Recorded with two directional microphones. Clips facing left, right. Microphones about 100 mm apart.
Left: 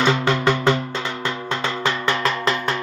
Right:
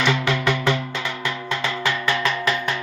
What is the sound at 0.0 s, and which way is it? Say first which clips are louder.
Music: left 3 dB; 35° left (ahead or behind).